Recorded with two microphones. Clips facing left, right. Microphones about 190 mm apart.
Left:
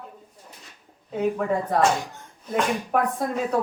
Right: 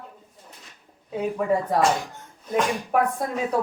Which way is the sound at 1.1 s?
5° right (ahead or behind).